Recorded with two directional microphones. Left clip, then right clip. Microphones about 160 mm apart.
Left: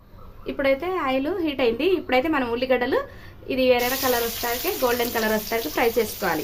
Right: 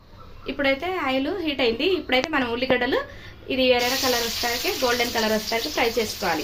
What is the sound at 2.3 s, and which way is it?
Sizzle, 10° left (ahead or behind).